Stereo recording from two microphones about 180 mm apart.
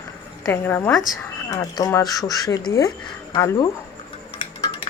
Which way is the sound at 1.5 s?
20° left (ahead or behind).